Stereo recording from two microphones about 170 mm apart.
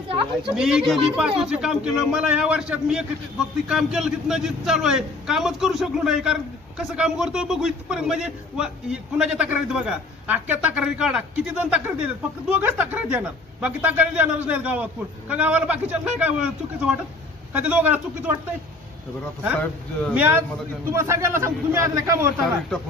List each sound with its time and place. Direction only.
0.6 s a man's voice: 5° right (ahead or behind)
20.2 s a man's voice: 15° right (ahead or behind)